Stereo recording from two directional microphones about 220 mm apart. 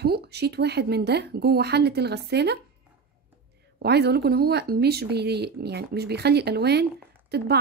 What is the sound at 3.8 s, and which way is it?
A woman's voice, 50° right (ahead or behind).